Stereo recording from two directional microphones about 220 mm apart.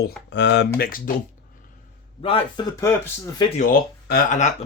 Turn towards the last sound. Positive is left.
turn(degrees=35)  # may be behind; listen again after turning